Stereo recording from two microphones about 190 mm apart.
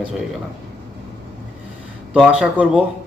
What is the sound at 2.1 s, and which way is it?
Speech, 5° right (ahead or behind).